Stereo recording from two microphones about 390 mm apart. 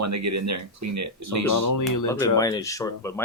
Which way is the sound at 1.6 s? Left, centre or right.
Left.